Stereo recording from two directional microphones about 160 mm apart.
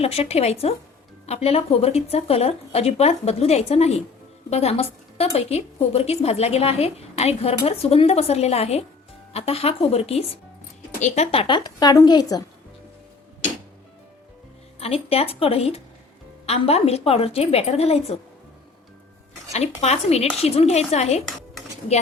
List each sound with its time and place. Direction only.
0.0 s a woman's voice: 40° left (ahead or behind); by 12.5 s 25° left (ahead or behind)
14.8 s a woman's voice: 40° left (ahead or behind)
19.5 s a woman's voice: 45° left (ahead or behind)